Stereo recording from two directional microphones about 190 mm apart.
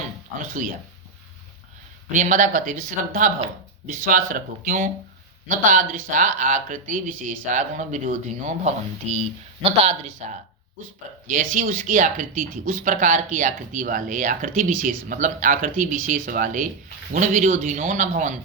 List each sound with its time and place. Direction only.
0.3 s speech: 45° right (ahead or behind)
2.1 s speech: 40° right (ahead or behind)